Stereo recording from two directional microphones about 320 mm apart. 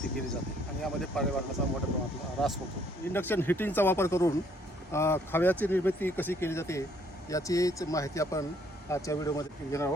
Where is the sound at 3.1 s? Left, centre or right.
Centre.